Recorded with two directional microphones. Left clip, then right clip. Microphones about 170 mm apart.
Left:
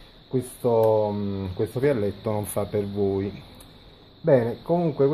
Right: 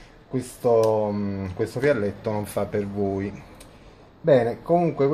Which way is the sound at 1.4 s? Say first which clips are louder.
Even; 35° left (ahead or behind).